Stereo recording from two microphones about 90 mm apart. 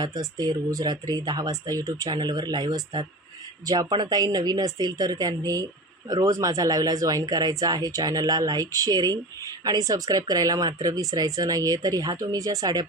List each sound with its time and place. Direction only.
0.0 s speech: 50° right (ahead or behind)